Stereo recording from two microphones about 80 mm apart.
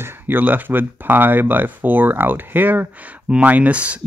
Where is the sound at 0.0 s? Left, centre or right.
Right.